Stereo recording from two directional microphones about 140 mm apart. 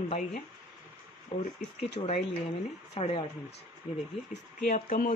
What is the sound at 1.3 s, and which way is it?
Speech, 60° left (ahead or behind).